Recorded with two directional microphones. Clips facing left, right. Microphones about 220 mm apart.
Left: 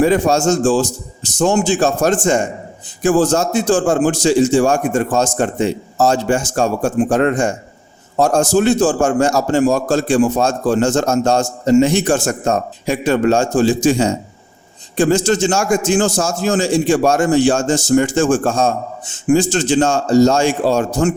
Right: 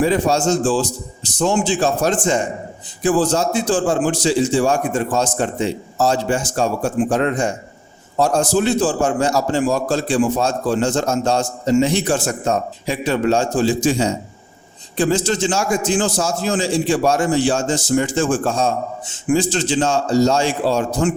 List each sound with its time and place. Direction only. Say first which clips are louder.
0.0 s a man's voice: left 3 dB; 45° left (ahead or behind)